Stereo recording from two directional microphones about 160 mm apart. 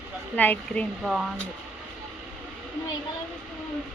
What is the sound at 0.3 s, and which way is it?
Speech, 10° left (ahead or behind).